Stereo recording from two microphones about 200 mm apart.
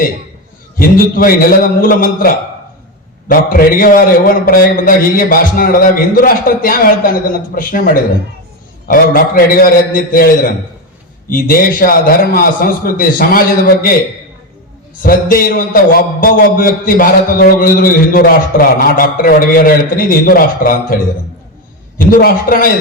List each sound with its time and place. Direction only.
0.8 s a man's voice: 45° left (ahead or behind)
15.0 s a man's voice: 45° left (ahead or behind)
21.9 s a man's voice: 45° left (ahead or behind)